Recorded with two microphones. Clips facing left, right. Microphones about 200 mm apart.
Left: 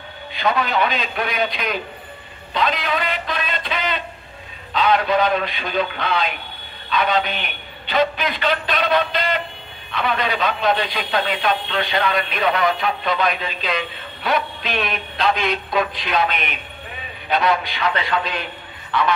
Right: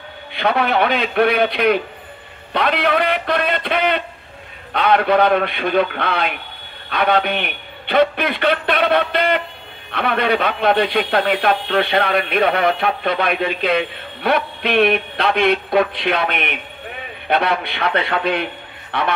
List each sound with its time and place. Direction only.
0.3 s a man's voice: 60° right (ahead or behind)